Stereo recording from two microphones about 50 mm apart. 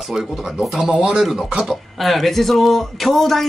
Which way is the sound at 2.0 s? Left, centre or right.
Centre.